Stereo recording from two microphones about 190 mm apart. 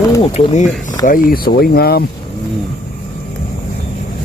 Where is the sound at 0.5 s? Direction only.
40° left (ahead or behind); by 2.0 s 55° left (ahead or behind).